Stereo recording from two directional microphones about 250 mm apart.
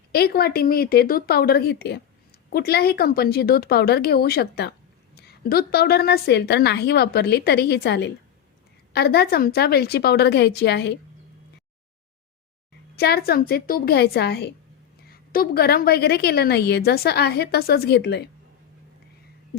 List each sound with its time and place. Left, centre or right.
0.1 s a woman's voice: left
13.0 s a woman's voice: left